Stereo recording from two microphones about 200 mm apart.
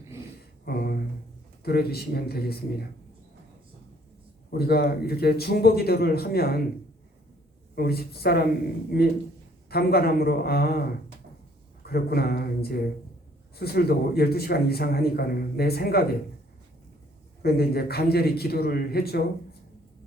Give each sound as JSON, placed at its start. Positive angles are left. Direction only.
{"t": 0.6, "sound": "a sound", "side_deg": 50}
{"t": 1.6, "sound": "speech", "side_deg": 50}
{"t": 4.5, "sound": "speech", "side_deg": 50}
{"t": 7.8, "sound": "speech", "side_deg": 50}
{"t": 9.6, "sound": "speech", "side_deg": 50}
{"t": 17.4, "sound": "speech", "side_deg": 50}